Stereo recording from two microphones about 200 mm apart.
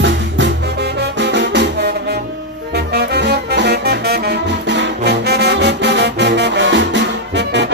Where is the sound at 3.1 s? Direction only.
60° right (ahead or behind).